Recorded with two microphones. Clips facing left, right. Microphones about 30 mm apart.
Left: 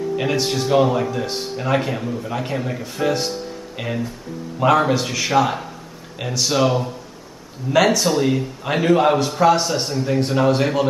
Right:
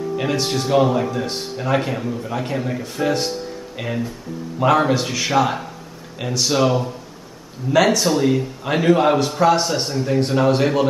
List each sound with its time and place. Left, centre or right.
0.2 s a man's voice: centre